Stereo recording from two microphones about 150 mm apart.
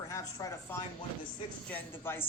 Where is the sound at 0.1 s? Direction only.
20° left (ahead or behind).